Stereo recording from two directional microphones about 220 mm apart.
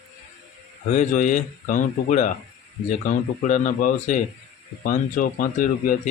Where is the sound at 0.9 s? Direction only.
35° left (ahead or behind).